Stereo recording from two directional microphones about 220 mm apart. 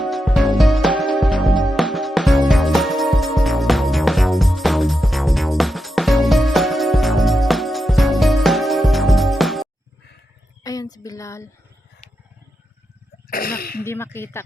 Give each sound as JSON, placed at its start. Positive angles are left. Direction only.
{"t": 0.0, "sound": "music", "side_deg": 0}
{"t": 10.6, "sound": "a sound", "side_deg": 15}
{"t": 13.3, "sound": "sneeze", "side_deg": 40}
{"t": 13.8, "sound": "speech", "side_deg": 10}